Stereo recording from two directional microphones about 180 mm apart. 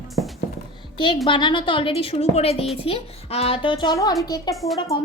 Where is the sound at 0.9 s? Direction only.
25° left (ahead or behind).